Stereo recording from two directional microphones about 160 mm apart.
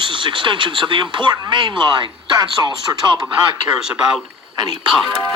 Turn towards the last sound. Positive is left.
turn(degrees=0)  # may be behind; listen again after turning